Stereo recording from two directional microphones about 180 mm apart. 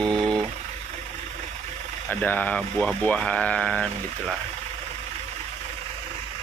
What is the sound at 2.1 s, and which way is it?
Speech, 10° left (ahead or behind).